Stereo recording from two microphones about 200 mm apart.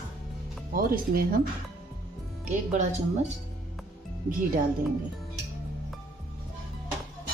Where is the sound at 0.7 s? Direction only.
45° right (ahead or behind).